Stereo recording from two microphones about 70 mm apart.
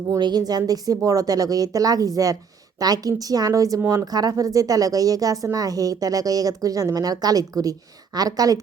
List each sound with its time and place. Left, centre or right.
0.2 s speech: right